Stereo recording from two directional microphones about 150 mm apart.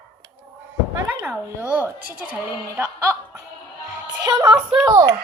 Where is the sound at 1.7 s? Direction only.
10° right (ahead or behind).